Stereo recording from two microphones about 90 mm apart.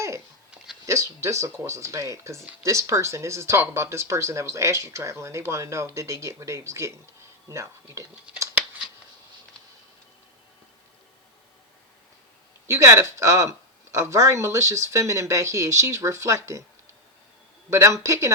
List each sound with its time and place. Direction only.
0.9 s speech: 35° right (ahead or behind)
12.6 s speech: 35° right (ahead or behind)
17.7 s speech: 35° right (ahead or behind)